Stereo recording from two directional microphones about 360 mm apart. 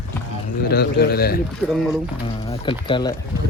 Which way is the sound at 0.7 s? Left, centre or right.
Left.